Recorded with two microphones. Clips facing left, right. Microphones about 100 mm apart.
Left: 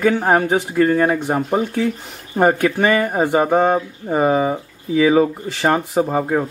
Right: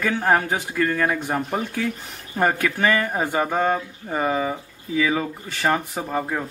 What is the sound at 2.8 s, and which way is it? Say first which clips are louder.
Speech: left 4 dB; 25° left (ahead or behind).